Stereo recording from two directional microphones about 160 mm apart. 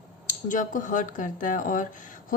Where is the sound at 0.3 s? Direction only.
55° left (ahead or behind).